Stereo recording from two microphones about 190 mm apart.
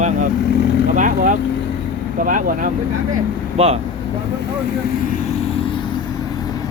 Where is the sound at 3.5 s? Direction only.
30° right (ahead or behind).